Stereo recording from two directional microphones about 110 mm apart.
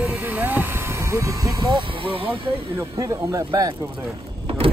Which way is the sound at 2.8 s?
30° right (ahead or behind).